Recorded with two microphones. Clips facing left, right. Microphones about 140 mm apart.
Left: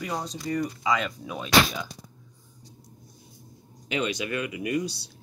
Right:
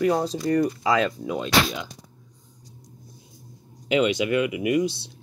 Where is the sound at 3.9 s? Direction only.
25° right (ahead or behind).